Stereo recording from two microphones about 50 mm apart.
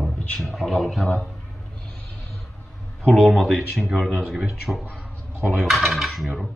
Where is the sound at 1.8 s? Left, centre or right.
Left.